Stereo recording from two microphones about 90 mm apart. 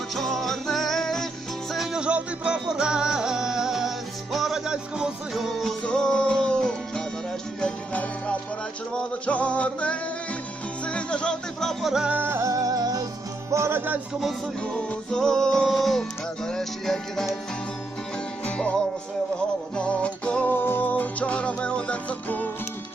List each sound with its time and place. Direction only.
0.2 s music: centre (ahead or behind)
5.8 s music: 5° left (ahead or behind)
12.0 s music: 20° right (ahead or behind)
12.4 s music: 40° right (ahead or behind)
13.5 s music: 30° right (ahead or behind)
14.1 s music: centre (ahead or behind)
14.6 s music: 10° left (ahead or behind)
18.4 s music: 15° left (ahead or behind)